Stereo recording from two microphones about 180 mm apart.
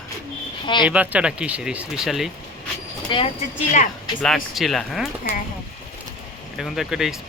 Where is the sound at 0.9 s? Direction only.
5° right (ahead or behind).